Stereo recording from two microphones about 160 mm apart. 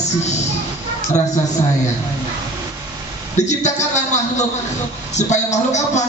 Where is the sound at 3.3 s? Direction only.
45° left (ahead or behind).